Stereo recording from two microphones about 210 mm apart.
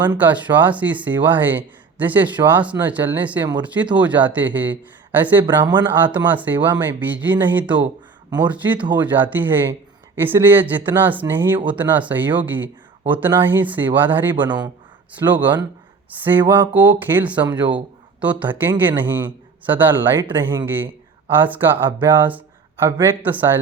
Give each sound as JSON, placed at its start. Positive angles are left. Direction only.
{"t": 0.0, "sound": "speech", "side_deg": -10}
{"t": 5.5, "sound": "speech", "side_deg": -20}
{"t": 6.1, "sound": "speech", "side_deg": -10}
{"t": 14.3, "sound": "speech", "side_deg": -20}
{"t": 15.2, "sound": "speech", "side_deg": -10}